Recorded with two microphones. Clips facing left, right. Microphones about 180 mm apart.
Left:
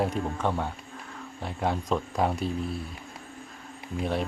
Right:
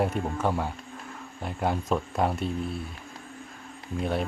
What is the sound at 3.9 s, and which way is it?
Speech, centre (ahead or behind).